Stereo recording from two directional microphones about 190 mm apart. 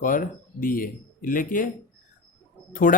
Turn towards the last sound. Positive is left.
turn(degrees=45)  # may be behind; listen again after turning